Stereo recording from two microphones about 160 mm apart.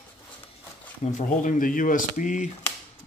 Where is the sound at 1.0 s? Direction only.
50° left (ahead or behind).